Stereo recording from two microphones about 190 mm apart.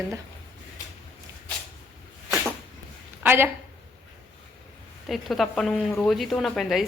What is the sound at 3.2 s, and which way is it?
Speech, 10° right (ahead or behind).